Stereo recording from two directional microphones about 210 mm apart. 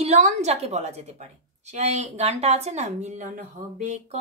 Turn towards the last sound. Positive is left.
turn(degrees=-35)  # may be behind; listen again after turning